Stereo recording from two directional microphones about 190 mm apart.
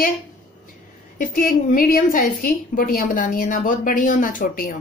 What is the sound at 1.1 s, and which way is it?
A woman's voice, 45° left (ahead or behind).